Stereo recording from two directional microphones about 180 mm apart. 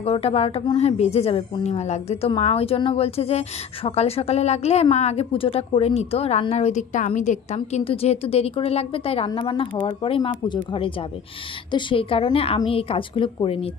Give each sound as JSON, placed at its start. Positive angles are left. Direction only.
{"t": 0.0, "sound": "a woman's voice", "side_deg": 35}